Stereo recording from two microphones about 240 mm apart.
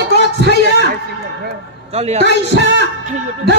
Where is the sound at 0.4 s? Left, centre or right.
Right.